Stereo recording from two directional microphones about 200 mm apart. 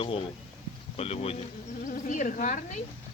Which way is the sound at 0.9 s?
30° left (ahead or behind).